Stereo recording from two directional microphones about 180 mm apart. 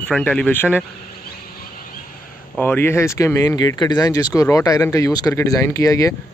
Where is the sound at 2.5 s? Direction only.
10° left (ahead or behind).